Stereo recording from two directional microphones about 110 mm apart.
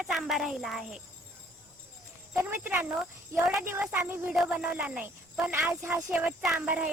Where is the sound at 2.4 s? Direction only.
20° right (ahead or behind).